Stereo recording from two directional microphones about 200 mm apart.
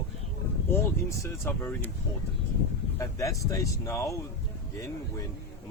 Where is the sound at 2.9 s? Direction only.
15° left (ahead or behind).